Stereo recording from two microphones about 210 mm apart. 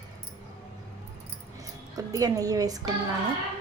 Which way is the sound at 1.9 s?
15° right (ahead or behind).